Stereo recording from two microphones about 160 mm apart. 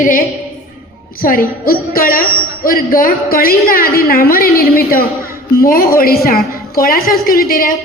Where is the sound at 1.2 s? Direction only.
65° left (ahead or behind).